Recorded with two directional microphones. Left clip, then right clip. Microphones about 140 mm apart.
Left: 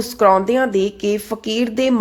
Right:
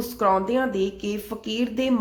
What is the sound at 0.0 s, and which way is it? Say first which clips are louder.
Speech: left 8 dB; 35° left (ahead or behind).